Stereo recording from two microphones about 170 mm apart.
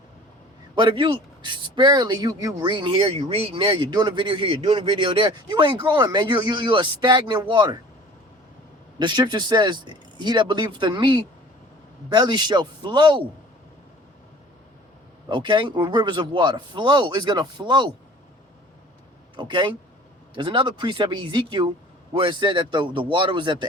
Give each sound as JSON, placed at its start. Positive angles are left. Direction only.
{"t": 0.8, "sound": "speech", "side_deg": -30}
{"t": 9.0, "sound": "speech", "side_deg": -25}
{"t": 15.3, "sound": "speech", "side_deg": -30}
{"t": 19.4, "sound": "speech", "side_deg": -25}